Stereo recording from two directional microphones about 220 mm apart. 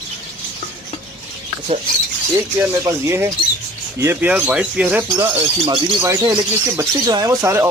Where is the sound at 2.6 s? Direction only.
10° right (ahead or behind).